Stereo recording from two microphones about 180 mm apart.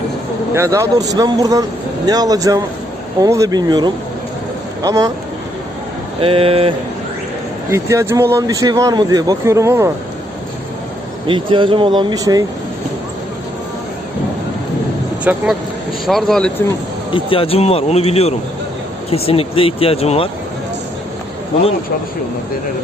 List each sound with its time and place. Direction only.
0.5 s speech: 15° right (ahead or behind)
6.1 s speech: 30° right (ahead or behind)
7.7 s a man's voice: 15° right (ahead or behind)
11.3 s speech: 25° right (ahead or behind)
15.2 s speech: 10° right (ahead or behind)
17.1 s speech: 30° left (ahead or behind)